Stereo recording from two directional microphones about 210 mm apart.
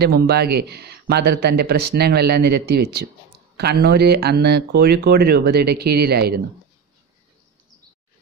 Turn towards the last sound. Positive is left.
turn(degrees=-50)  # may be behind; listen again after turning